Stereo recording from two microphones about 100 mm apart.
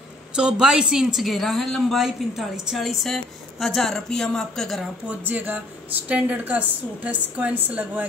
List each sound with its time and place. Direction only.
0.4 s speech: 10° right (ahead or behind)
5.2 s a woman's voice: 20° right (ahead or behind)